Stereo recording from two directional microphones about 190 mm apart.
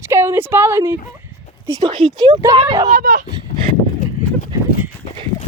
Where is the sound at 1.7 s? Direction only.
25° right (ahead or behind).